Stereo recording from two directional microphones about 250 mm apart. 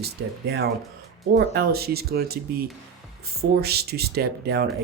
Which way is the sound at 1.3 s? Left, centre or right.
Right.